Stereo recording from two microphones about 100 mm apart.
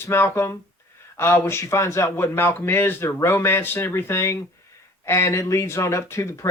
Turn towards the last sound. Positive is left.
turn(degrees=30)  # may be behind; listen again after turning